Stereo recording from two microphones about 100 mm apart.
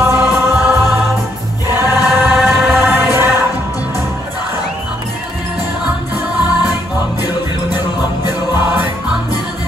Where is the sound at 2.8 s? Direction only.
25° right (ahead or behind).